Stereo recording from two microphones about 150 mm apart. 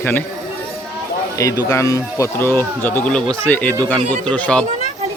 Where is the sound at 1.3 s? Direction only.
20° left (ahead or behind).